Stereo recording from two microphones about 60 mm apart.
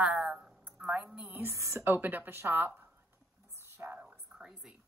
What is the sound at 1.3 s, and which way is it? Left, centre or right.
Speech, right.